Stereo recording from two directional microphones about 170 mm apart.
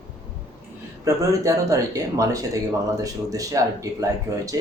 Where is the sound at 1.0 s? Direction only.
20° right (ahead or behind).